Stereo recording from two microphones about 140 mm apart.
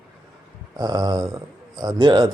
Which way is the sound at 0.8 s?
30° right (ahead or behind).